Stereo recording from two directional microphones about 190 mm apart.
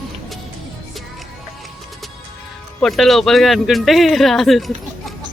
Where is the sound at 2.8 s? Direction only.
Centre (ahead or behind).